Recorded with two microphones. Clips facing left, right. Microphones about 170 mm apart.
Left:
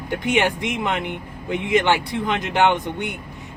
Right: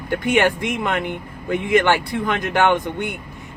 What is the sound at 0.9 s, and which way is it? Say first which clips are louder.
Speech: right 2 dB; 50° right (ahead or behind).